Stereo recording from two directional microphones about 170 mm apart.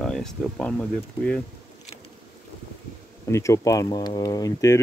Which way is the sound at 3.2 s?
15° left (ahead or behind).